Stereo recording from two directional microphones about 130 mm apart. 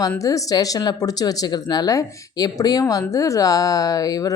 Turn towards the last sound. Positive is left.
turn(degrees=30)  # may be behind; listen again after turning